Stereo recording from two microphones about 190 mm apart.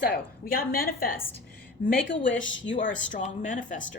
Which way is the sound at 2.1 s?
85° left.